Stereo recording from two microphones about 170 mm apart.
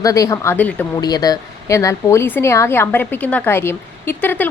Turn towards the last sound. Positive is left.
turn(degrees=10)  # may be behind; listen again after turning